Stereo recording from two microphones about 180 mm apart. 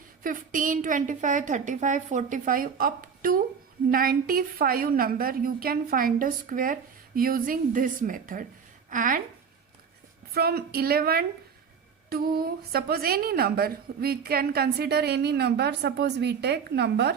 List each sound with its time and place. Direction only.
0.2 s a woman's voice: 50° right (ahead or behind)
10.3 s a woman's voice: 60° right (ahead or behind)